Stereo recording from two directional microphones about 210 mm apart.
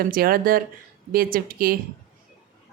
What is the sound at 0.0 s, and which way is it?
A woman's voice, 45° right (ahead or behind).